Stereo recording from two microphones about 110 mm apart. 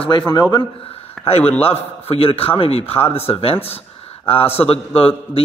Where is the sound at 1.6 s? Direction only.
65° left (ahead or behind).